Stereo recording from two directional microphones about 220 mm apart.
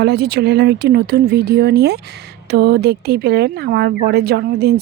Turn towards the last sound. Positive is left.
turn(degrees=-45)  # may be behind; listen again after turning